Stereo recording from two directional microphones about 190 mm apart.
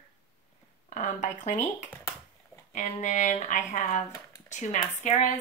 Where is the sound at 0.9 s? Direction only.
40° left (ahead or behind).